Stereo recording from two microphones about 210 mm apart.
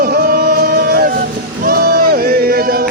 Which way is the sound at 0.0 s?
45° right (ahead or behind).